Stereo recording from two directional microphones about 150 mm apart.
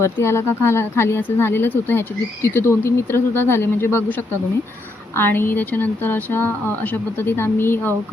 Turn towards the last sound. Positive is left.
turn(degrees=15)  # may be behind; listen again after turning